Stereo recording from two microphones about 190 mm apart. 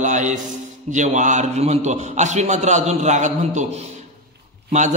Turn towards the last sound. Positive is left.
turn(degrees=-40)  # may be behind; listen again after turning